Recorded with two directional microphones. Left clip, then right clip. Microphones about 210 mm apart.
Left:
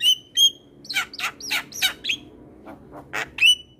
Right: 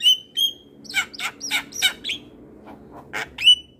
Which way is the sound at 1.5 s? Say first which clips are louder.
Right 3 dB; 20° left (ahead or behind).